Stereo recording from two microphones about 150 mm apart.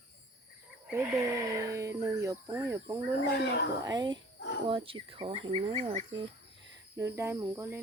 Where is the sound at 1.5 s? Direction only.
20° right (ahead or behind); by 5.9 s 35° right (ahead or behind).